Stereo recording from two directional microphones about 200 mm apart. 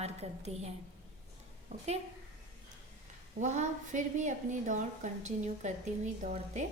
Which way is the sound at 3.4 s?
35° right (ahead or behind).